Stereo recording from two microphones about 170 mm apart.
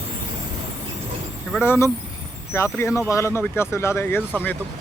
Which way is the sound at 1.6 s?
15° left (ahead or behind).